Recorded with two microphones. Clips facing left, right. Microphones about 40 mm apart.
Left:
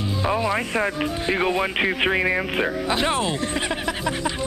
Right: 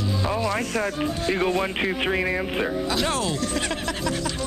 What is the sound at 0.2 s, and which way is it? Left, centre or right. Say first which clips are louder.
Speech: left 4 dB; left.